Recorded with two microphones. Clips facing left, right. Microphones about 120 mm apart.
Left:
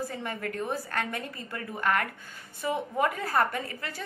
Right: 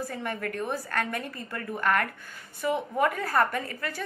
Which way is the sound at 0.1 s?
20° left (ahead or behind).